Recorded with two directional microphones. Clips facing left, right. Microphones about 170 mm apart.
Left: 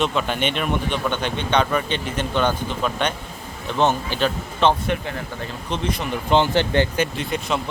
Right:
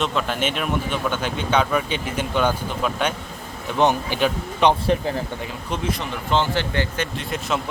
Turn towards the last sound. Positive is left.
turn(degrees=0)  # may be behind; listen again after turning